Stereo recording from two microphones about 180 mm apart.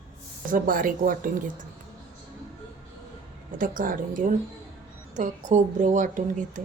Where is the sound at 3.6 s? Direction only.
50° right (ahead or behind).